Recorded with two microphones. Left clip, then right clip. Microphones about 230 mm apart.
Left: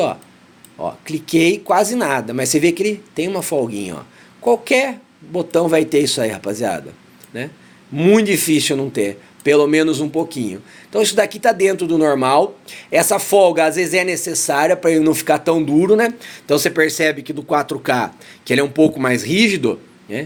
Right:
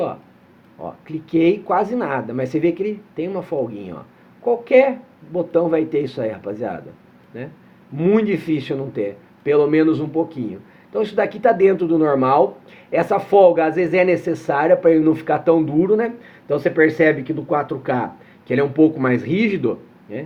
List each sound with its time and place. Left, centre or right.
0.8 s speech: left
7.9 s speech: left